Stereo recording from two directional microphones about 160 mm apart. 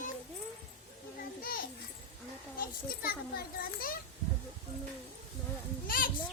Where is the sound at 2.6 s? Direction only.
70° left (ahead or behind).